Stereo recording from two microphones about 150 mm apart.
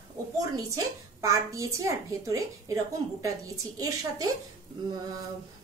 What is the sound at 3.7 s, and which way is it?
Speech, 25° right (ahead or behind).